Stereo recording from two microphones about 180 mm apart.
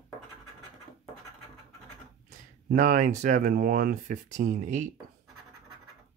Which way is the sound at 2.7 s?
45° right (ahead or behind).